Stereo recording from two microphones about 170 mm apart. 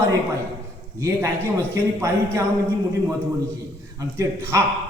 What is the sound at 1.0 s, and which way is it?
A man's voice, 15° right (ahead or behind).